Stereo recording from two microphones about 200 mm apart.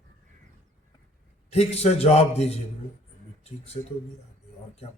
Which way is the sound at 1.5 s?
30° left (ahead or behind).